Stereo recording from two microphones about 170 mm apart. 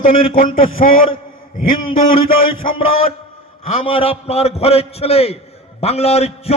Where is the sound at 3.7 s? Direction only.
35° left (ahead or behind).